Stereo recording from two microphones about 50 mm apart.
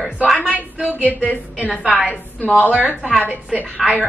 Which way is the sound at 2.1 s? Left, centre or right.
Left.